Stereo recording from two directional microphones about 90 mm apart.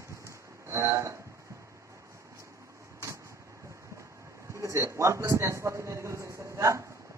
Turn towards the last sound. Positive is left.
turn(degrees=-35)  # may be behind; listen again after turning